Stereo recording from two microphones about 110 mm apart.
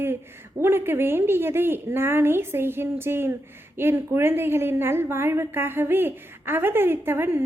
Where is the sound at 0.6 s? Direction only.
20° right (ahead or behind).